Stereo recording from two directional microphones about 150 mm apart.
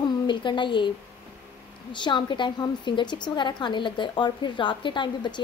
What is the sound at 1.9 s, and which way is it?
A woman's voice, 30° left (ahead or behind).